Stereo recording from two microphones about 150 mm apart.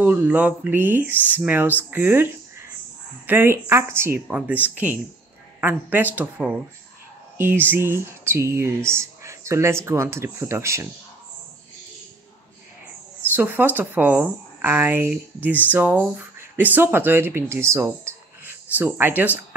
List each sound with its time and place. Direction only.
0.0 s speech: 10° right (ahead or behind)
13.2 s speech: 15° right (ahead or behind)